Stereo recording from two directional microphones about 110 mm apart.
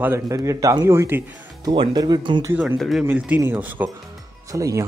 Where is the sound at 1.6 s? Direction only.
45° right (ahead or behind).